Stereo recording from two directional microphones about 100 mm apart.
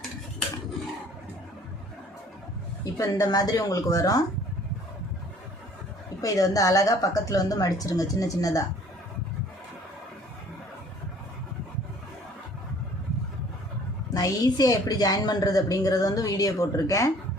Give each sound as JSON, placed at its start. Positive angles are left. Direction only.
{"t": 2.8, "sound": "a woman's voice", "side_deg": 35}
{"t": 6.2, "sound": "a woman's voice", "side_deg": 35}
{"t": 14.1, "sound": "a woman's voice", "side_deg": 40}